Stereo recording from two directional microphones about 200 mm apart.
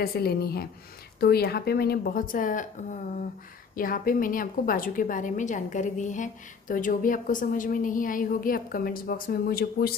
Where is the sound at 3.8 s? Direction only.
45° left (ahead or behind).